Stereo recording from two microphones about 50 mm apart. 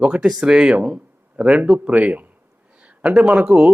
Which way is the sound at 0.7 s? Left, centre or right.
Right.